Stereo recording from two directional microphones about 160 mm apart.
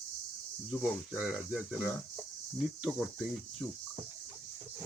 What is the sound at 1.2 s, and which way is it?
Speech, 5° left (ahead or behind).